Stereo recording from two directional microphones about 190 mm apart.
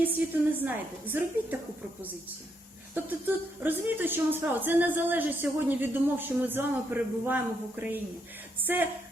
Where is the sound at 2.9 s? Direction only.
10° right (ahead or behind).